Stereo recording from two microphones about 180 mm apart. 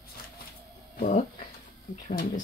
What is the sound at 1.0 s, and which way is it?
Speech, 40° left (ahead or behind).